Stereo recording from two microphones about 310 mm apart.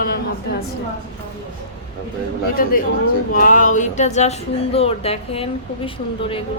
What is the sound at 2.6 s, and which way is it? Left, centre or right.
A woman's voice, left.